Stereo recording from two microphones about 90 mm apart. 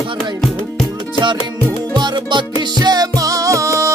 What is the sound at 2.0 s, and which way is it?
Music, 55° right (ahead or behind).